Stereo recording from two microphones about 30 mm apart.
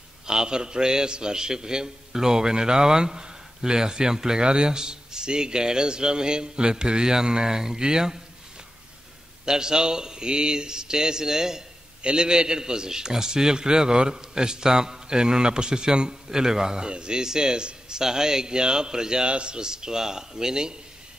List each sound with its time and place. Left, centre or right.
0.3 s a man's voice: right
9.5 s a man's voice: right
12.0 s a man's voice: right
19.2 s a man's voice: right